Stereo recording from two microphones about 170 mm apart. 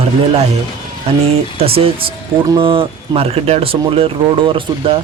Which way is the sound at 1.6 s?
35° right (ahead or behind).